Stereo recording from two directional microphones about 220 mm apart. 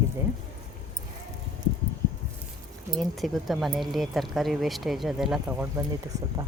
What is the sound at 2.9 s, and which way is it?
Speech, centre (ahead or behind).